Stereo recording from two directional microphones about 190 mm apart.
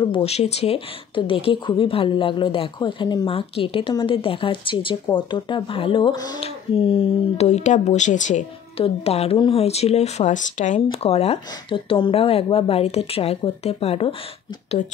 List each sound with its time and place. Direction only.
0.0 s speech: 30° left (ahead or behind)